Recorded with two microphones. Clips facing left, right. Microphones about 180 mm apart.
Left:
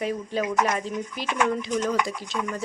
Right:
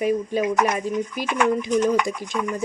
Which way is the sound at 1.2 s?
65° right (ahead or behind).